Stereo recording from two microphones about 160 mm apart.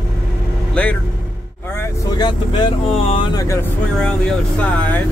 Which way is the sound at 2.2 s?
30° left (ahead or behind).